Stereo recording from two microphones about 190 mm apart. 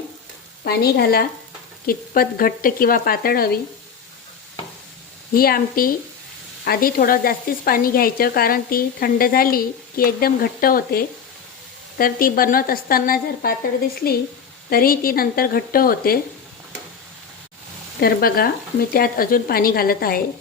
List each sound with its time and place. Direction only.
0.6 s speech: 55° left (ahead or behind)
5.3 s speech: 50° left (ahead or behind)
14.7 s speech: 50° left (ahead or behind)
18.0 s speech: 50° left (ahead or behind)